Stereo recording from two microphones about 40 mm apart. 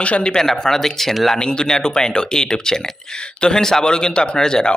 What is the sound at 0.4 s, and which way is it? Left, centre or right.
Speech, centre.